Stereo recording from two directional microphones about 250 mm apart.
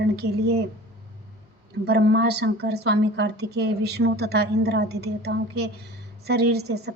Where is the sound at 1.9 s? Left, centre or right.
Right.